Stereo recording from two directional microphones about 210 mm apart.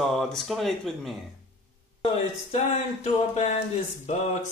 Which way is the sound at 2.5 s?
30° left (ahead or behind).